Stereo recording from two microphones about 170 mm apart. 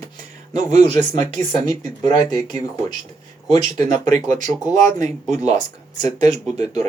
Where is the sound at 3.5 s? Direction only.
20° left (ahead or behind).